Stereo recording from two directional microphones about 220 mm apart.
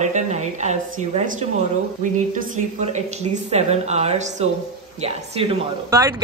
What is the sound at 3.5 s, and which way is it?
A woman's voice, 30° right (ahead or behind).